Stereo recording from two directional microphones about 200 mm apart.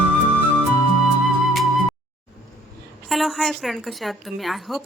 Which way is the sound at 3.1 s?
Centre (ahead or behind).